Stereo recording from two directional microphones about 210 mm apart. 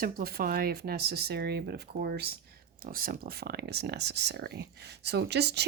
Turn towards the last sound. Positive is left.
turn(degrees=-50)  # may be behind; listen again after turning